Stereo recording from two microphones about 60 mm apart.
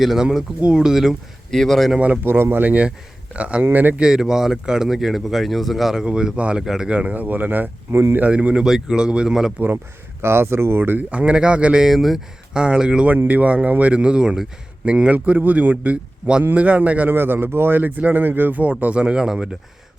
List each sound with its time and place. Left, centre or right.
0.0 s speech: centre
1.5 s speech: centre
2.2 s speech: right
4.0 s speech: centre
6.1 s speech: centre
8.3 s speech: centre
9.6 s speech: right
11.1 s speech: centre
11.8 s speech: centre
12.5 s speech: centre
13.2 s speech: right
17.2 s speech: right; by 19.5 s centre